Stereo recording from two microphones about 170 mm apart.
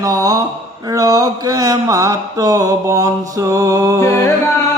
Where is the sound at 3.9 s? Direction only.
15° left (ahead or behind).